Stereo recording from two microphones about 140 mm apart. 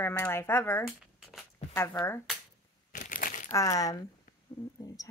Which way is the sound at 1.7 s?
15° left (ahead or behind).